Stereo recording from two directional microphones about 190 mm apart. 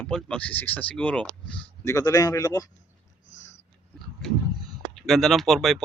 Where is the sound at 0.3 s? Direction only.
5° left (ahead or behind).